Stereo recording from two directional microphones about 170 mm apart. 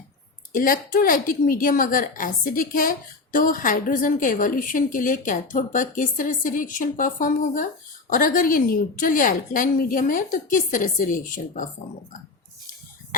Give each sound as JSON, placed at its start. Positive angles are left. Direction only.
{"t": 0.5, "sound": "a woman's voice", "side_deg": 55}